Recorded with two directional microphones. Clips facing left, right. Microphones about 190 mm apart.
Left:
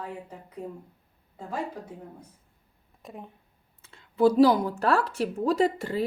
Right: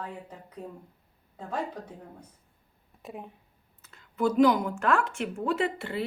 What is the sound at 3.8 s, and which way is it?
Speech, 30° left (ahead or behind).